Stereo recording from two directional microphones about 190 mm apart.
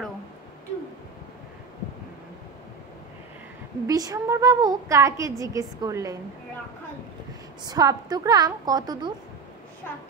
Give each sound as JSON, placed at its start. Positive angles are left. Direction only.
{"t": 3.8, "sound": "a woman's voice", "side_deg": -20}
{"t": 7.6, "sound": "a woman's voice", "side_deg": -20}